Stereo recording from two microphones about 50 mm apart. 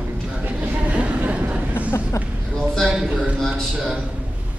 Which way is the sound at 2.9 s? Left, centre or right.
Centre.